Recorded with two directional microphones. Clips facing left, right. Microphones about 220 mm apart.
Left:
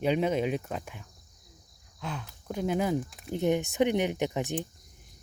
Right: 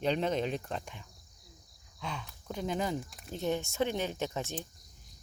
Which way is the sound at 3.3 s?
15° left (ahead or behind).